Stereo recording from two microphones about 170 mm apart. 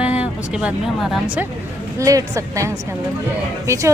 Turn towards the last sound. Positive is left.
turn(degrees=-15)  # may be behind; listen again after turning